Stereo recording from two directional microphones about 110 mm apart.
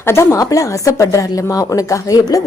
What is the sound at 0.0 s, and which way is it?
A woman's voice, 25° left (ahead or behind).